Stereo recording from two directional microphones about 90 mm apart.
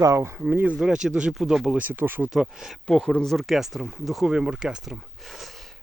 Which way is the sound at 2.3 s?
5° right (ahead or behind).